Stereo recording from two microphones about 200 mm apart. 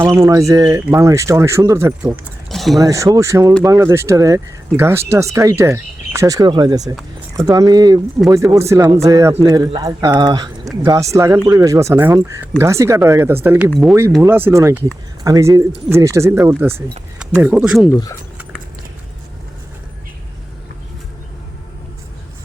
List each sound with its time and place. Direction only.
0.0 s speech: 15° right (ahead or behind)
2.5 s a sound: centre (ahead or behind)
2.8 s speech: 15° right (ahead or behind); by 13.9 s centre (ahead or behind)
14.2 s speech: 10° right (ahead or behind)